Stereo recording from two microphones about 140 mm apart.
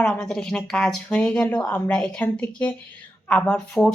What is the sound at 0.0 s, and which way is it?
Speech, 5° left (ahead or behind).